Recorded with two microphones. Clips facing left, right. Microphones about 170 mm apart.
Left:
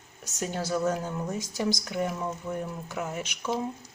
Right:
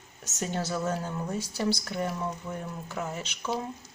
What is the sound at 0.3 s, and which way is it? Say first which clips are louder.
Speech: left 1 dB; 10° left (ahead or behind).